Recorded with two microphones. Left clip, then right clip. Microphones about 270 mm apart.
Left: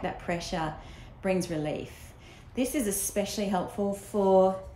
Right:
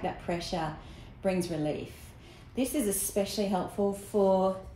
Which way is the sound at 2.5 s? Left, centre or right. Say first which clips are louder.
Left 1 dB; centre.